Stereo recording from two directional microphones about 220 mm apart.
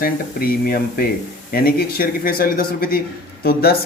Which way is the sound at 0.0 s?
40° left (ahead or behind).